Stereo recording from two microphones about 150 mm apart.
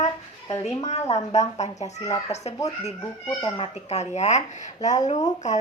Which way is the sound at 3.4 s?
40° left (ahead or behind).